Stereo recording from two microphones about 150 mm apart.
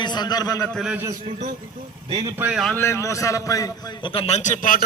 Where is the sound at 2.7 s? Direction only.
20° left (ahead or behind); by 4.4 s 40° left (ahead or behind).